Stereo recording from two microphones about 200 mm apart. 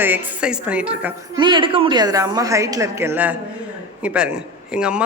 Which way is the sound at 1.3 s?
25° right (ahead or behind).